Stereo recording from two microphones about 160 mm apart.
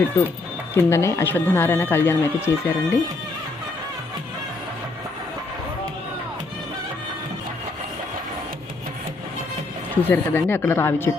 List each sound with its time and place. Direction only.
0.7 s speech: 15° left (ahead or behind)
9.9 s speech: 10° left (ahead or behind)